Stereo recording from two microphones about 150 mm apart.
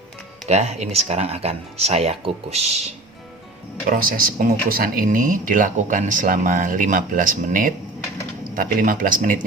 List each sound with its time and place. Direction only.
0.4 s speech: 45° right (ahead or behind)
3.8 s speech: 70° right (ahead or behind)